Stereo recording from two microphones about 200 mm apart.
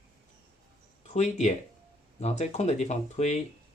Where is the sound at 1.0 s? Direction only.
35° left (ahead or behind).